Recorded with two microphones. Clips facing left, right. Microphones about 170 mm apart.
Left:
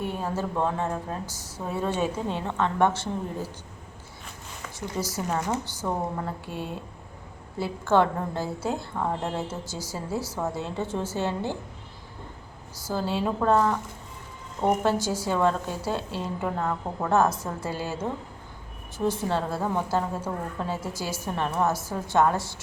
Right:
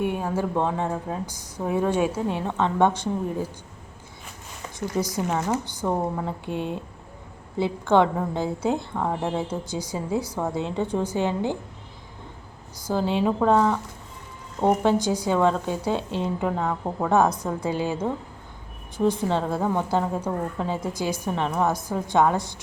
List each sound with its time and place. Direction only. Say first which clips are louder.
0.0 s speech: right 4 dB; 10° right (ahead or behind)
4.9 s a woman's voice: right 4 dB; 5° left (ahead or behind)
5.4 s speech: right 3 dB; 10° right (ahead or behind)
12.9 s speech: right 4 dB; 15° right (ahead or behind)
18.9 s a woman's voice: right 4 dB; 5° left (ahead or behind)
19.6 s speech: right 3 dB; 15° right (ahead or behind)